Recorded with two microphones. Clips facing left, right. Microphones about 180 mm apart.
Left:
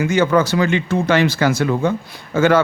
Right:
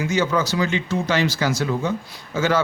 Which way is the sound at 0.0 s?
55° left (ahead or behind).